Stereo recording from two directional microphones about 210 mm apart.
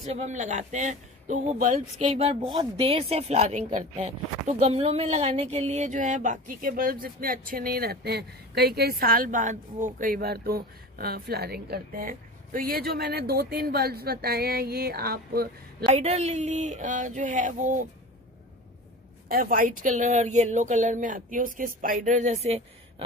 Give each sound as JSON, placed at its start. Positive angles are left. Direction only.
{"t": 0.1, "sound": "speech", "side_deg": -35}
{"t": 15.8, "sound": "speech", "side_deg": -30}
{"t": 19.2, "sound": "speech", "side_deg": -40}